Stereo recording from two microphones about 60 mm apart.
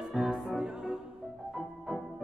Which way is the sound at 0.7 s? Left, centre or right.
Centre.